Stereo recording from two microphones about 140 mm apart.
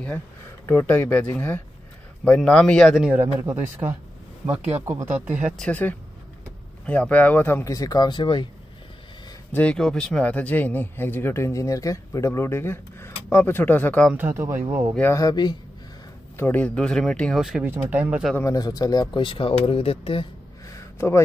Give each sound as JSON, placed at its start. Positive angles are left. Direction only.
{"t": 0.7, "sound": "a man's voice", "side_deg": 15}
{"t": 5.0, "sound": "speech", "side_deg": -10}
{"t": 5.6, "sound": "speech", "side_deg": 10}
{"t": 9.5, "sound": "speech", "side_deg": 10}
{"t": 14.1, "sound": "speech", "side_deg": -15}
{"t": 15.0, "sound": "speech", "side_deg": 20}
{"t": 16.3, "sound": "a man's voice", "side_deg": 15}
{"t": 17.6, "sound": "speech", "side_deg": -15}
{"t": 18.3, "sound": "speech", "side_deg": 25}
{"t": 20.6, "sound": "a sound", "side_deg": 20}